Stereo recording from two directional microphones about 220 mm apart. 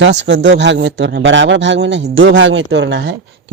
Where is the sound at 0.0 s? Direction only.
55° right (ahead or behind).